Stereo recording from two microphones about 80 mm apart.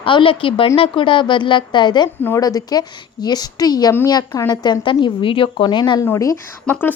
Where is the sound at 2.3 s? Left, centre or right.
Left.